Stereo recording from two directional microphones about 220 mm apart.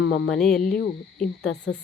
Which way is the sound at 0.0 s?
65° left (ahead or behind).